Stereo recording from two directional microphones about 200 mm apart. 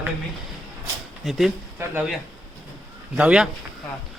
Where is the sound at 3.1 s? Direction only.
5° right (ahead or behind).